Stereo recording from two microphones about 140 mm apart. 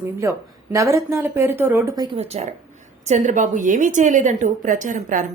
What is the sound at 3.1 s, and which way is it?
A woman's voice, 60° right (ahead or behind).